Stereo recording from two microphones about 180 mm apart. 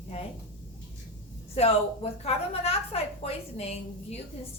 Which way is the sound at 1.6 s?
35° left (ahead or behind).